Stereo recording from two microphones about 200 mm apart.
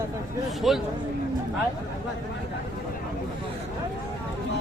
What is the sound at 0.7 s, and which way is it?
Speech, centre (ahead or behind).